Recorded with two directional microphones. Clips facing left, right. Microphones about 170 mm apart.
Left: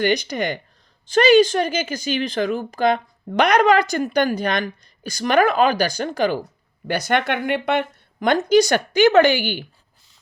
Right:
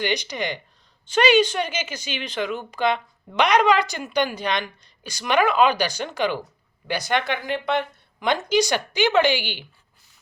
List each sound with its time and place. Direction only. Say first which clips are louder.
0.0 s speech: left 5 dB; 50° left (ahead or behind)
6.8 s speech: left 3 dB; 55° left (ahead or behind)